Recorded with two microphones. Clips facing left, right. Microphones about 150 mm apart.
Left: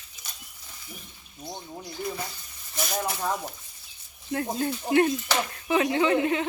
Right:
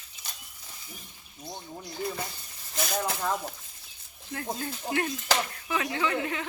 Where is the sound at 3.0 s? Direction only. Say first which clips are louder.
Left 2 dB; 10° left (ahead or behind).